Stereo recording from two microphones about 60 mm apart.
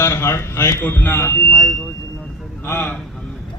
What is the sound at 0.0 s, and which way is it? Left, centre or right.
A man's voice, left.